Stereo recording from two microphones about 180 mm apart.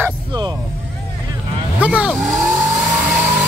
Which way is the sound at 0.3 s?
25° right (ahead or behind).